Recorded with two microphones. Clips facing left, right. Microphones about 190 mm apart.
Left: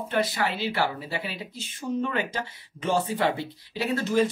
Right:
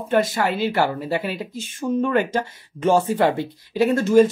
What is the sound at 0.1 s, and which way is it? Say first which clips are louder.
Speech: right 7 dB; 45° right (ahead or behind).